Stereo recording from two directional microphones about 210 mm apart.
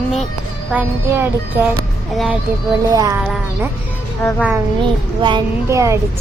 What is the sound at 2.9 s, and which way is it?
Speech, 15° right (ahead or behind).